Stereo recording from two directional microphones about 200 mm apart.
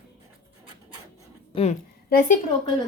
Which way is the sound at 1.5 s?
30° left (ahead or behind).